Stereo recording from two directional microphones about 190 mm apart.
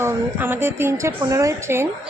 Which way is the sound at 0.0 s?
10° right (ahead or behind).